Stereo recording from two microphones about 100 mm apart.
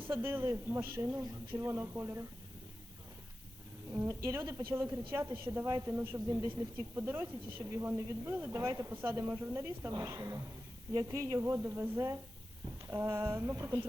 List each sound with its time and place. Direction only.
0.1 s speech: 20° right (ahead or behind)
3.9 s a woman's voice: 25° right (ahead or behind)
5.9 s speech: 15° right (ahead or behind)
6.1 s a woman's voice: 35° right (ahead or behind)
6.5 s a woman's voice: 20° right (ahead or behind)